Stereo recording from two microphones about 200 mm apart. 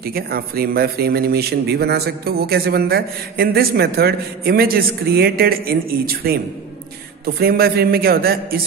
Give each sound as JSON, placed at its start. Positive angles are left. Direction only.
{"t": 0.0, "sound": "a man's voice", "side_deg": -50}